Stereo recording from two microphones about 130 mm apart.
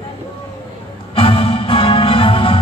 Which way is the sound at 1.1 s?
45° left (ahead or behind).